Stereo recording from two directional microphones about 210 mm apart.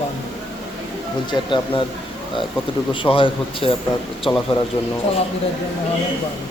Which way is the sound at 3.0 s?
25° left (ahead or behind).